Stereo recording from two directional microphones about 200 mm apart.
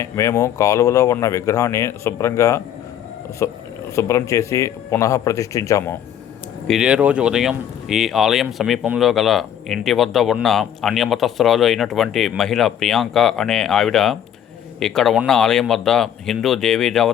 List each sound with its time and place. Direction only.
0.0 s speech: 15° left (ahead or behind)
6.7 s speech: 5° right (ahead or behind)